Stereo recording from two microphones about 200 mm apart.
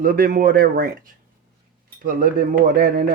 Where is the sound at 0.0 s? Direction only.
45° right (ahead or behind).